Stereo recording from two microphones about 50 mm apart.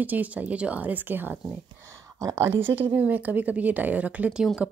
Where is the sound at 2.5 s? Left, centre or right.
Right.